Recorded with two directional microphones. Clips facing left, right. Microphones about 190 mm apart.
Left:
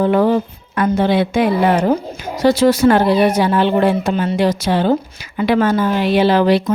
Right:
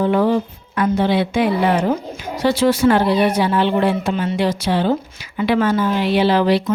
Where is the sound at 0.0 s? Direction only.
45° left (ahead or behind).